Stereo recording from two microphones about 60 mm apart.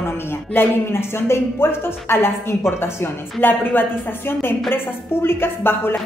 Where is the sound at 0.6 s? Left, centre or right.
Left.